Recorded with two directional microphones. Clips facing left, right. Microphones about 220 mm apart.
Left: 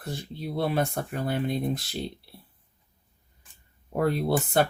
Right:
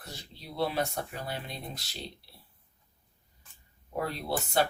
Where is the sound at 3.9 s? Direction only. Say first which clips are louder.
Left 8 dB; 55° left (ahead or behind).